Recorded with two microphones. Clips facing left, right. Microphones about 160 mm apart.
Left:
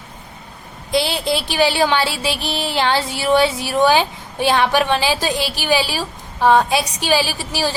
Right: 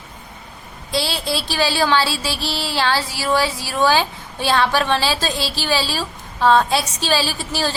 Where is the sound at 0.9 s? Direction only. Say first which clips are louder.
Left 4 dB; 15° left (ahead or behind).